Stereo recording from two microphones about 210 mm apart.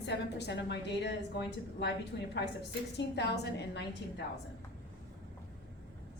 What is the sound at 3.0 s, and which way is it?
A woman's voice, 55° left (ahead or behind).